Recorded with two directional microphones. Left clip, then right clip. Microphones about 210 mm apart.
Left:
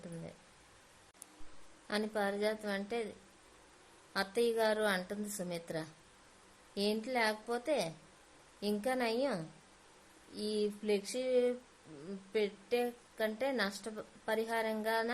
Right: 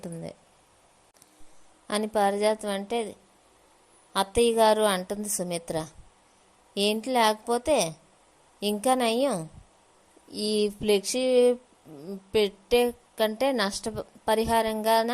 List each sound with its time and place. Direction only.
0.0 s speech: 35° right (ahead or behind)
1.9 s a woman's voice: 25° right (ahead or behind)
4.1 s a woman's voice: 25° right (ahead or behind)